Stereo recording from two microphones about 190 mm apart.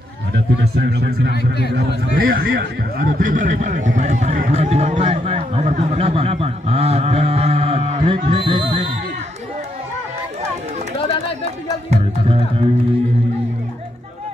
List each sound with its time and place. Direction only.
0.3 s speech: 60° right (ahead or behind)
1.3 s speech: 60° left (ahead or behind)
2.1 s a sound: 50° right (ahead or behind); by 8.8 s 25° right (ahead or behind)
11.4 s music: 30° right (ahead or behind)